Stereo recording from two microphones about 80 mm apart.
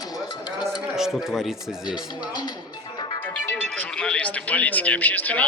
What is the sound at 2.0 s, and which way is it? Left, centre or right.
Speech, left.